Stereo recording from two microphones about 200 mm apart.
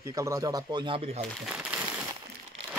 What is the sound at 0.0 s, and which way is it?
Speech, 15° right (ahead or behind).